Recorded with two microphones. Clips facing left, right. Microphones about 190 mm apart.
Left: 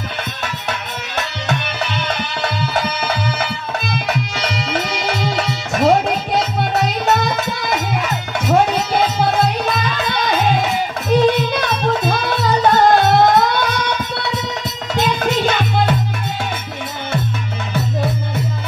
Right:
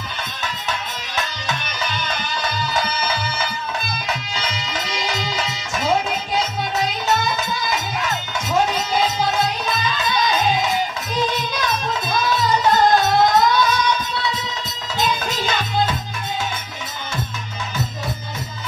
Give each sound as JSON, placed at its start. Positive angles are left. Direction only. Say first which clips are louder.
{"t": 0.4, "sound": "music", "louder": "left 3 dB", "side_deg": 65}